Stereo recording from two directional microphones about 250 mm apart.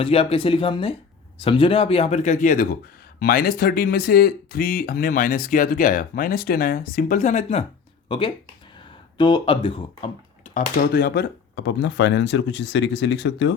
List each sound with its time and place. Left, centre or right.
0.0 s speech: left
10.5 s speech: left